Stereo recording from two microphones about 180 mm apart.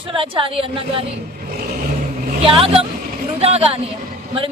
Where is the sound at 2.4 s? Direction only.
30° right (ahead or behind).